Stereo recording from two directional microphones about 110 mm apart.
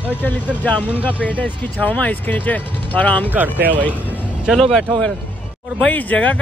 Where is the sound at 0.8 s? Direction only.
15° right (ahead or behind).